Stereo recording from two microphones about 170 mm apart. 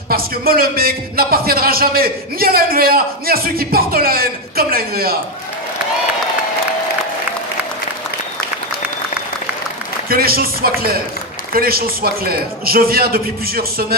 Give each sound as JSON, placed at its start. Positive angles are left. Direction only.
{"t": 0.1, "sound": "a man's voice", "side_deg": -60}
{"t": 10.1, "sound": "a man's voice", "side_deg": -60}